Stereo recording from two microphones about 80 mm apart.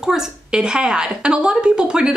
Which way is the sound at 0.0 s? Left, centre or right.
Centre.